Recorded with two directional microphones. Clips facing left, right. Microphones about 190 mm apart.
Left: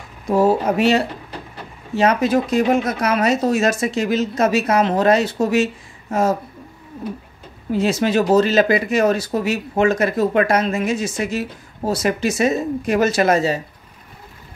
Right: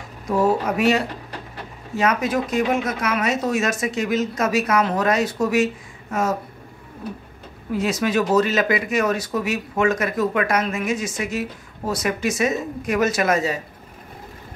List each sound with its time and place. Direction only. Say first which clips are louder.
0.3 s speech: left 4 dB; 30° left (ahead or behind)
7.7 s speech: left 3 dB; 30° left (ahead or behind)